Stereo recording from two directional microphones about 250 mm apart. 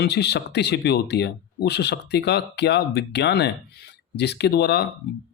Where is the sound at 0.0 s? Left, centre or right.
Left.